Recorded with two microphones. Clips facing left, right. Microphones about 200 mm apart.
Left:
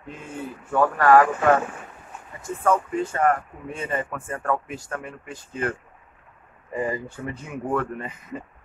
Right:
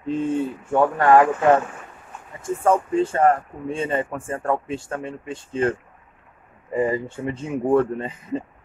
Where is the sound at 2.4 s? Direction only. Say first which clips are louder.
Right 3 dB; 30° right (ahead or behind).